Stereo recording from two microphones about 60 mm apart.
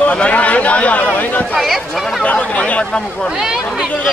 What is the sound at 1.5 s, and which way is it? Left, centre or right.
Speech, centre.